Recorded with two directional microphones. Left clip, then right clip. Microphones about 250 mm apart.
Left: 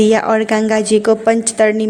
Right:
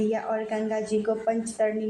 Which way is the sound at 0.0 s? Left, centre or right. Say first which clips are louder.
Left 15 dB; left.